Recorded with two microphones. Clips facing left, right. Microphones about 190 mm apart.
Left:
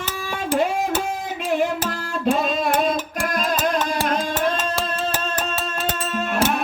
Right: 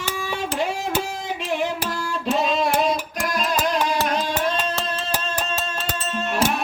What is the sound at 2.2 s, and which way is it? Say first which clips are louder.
Music: left 1 dB; 50° left (ahead or behind).